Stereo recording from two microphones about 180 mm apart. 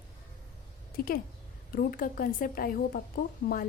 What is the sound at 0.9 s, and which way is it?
A woman's voice, 55° left (ahead or behind).